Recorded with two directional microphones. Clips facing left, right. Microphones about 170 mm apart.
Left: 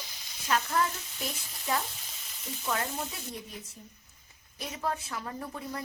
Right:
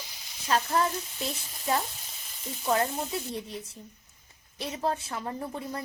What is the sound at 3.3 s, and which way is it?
A woman's voice, 30° right (ahead or behind).